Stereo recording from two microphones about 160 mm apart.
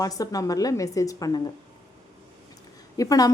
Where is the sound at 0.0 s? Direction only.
20° left (ahead or behind).